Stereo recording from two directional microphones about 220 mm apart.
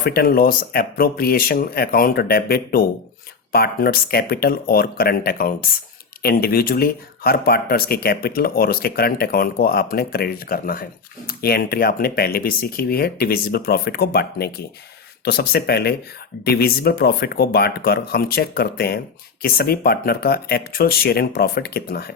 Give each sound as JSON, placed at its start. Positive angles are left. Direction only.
{"t": 0.0, "sound": "speech", "side_deg": 45}